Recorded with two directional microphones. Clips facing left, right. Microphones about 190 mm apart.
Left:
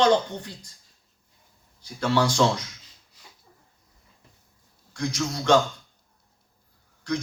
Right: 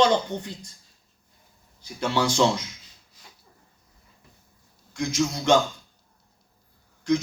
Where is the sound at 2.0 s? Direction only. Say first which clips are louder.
Even; 20° right (ahead or behind).